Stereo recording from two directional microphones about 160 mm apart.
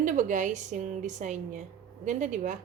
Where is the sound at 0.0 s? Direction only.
50° right (ahead or behind).